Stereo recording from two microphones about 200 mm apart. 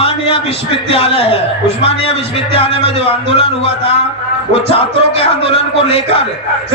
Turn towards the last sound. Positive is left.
turn(degrees=30)  # may be behind; listen again after turning